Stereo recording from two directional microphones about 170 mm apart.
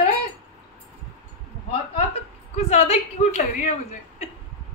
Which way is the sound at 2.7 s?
40° left (ahead or behind).